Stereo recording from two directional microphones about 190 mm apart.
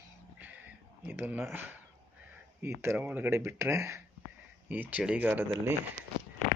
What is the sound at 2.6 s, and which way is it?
Speech, 10° right (ahead or behind).